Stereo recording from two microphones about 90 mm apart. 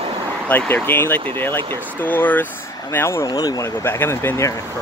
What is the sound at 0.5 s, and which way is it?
Speech, 15° left (ahead or behind).